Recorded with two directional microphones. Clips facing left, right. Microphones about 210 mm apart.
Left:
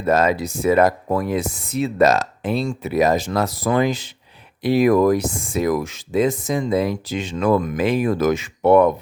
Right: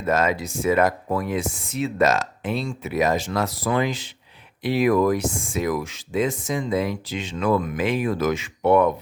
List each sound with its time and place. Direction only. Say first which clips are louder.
0.0 s speech: left 4 dB; 35° left (ahead or behind)